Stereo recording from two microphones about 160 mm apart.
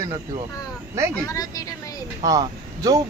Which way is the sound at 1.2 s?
20° left (ahead or behind).